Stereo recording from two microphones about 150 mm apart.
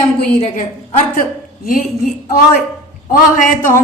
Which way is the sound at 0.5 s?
55° left (ahead or behind).